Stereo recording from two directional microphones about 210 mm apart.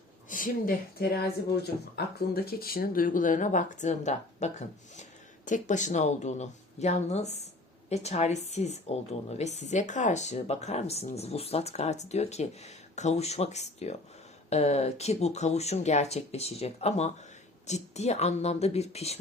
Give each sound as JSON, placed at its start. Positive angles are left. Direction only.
{"t": 0.3, "sound": "speech", "side_deg": 40}